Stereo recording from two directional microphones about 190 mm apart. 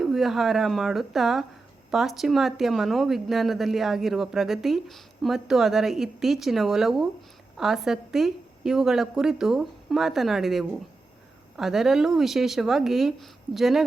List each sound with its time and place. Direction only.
0.0 s speech: centre (ahead or behind)